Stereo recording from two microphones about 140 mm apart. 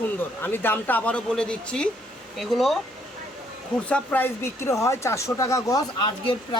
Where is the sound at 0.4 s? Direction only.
15° left (ahead or behind).